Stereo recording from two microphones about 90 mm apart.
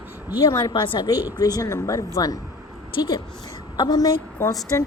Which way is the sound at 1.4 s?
45° left (ahead or behind).